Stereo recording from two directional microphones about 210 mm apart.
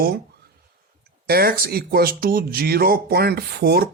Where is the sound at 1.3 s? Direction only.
45° right (ahead or behind).